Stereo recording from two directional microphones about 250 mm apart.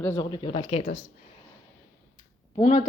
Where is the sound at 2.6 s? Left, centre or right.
Left.